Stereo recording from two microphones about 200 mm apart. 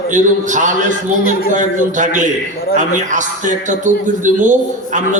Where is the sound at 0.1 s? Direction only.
40° right (ahead or behind).